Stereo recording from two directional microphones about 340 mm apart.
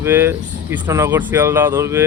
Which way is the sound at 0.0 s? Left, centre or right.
Centre.